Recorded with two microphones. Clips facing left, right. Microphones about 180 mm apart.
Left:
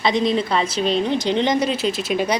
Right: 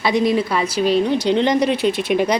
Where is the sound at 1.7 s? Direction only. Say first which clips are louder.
Right 4 dB; 60° right (ahead or behind).